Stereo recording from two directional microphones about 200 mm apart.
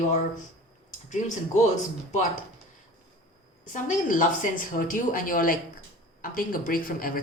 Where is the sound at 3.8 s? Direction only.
40° left (ahead or behind).